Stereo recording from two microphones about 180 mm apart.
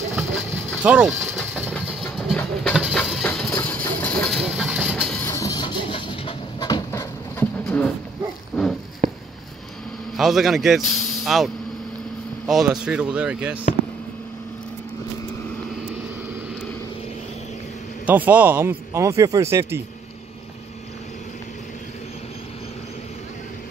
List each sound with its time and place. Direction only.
0.8 s speech: 5° right (ahead or behind)
1.9 s train: centre (ahead or behind)
2.7 s engine: centre (ahead or behind)
5.1 s music: 15° left (ahead or behind)
8.5 s a sound: centre (ahead or behind)
9.0 s a sound: 40° right (ahead or behind)
10.1 s speech: centre (ahead or behind)
18.0 s speech: 10° right (ahead or behind)